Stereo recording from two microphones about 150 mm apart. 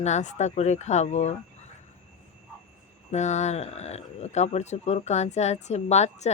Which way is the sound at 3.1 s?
50° left (ahead or behind).